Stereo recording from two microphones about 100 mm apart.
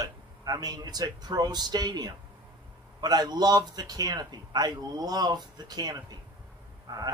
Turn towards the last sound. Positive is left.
turn(degrees=-40)  # may be behind; listen again after turning